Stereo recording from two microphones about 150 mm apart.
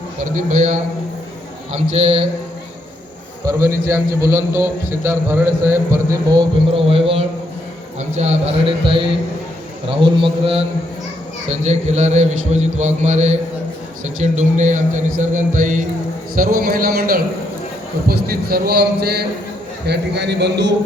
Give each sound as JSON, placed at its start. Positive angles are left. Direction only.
{"t": 0.3, "sound": "a man's voice", "side_deg": -55}
{"t": 1.7, "sound": "a man's voice", "side_deg": -40}
{"t": 3.4, "sound": "a man's voice", "side_deg": -20}
{"t": 6.7, "sound": "a man's voice", "side_deg": -40}
{"t": 11.4, "sound": "a man's voice", "side_deg": -50}
{"t": 16.3, "sound": "a man's voice", "side_deg": -75}